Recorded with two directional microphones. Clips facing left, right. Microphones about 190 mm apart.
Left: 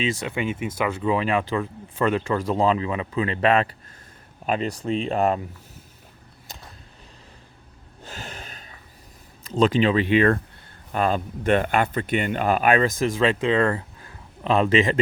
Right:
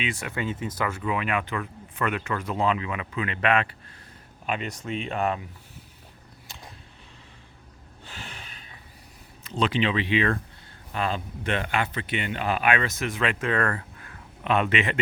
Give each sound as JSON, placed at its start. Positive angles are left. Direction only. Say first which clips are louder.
{"t": 0.0, "sound": "speech", "louder": "left 5 dB", "side_deg": 20}
{"t": 6.5, "sound": "a sound", "louder": "left 3 dB", "side_deg": 40}
{"t": 8.0, "sound": "a sound", "louder": "left 5 dB", "side_deg": 45}
{"t": 9.5, "sound": "speech", "louder": "left 6 dB", "side_deg": 45}
{"t": 13.4, "sound": "speech", "louder": "left 5 dB", "side_deg": 20}
{"t": 14.4, "sound": "speech", "louder": "left 5 dB", "side_deg": 30}